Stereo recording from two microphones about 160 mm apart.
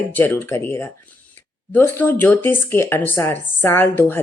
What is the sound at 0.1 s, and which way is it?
Speech, 10° left (ahead or behind).